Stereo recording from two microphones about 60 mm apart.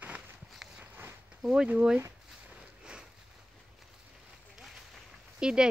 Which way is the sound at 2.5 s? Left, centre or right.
Centre.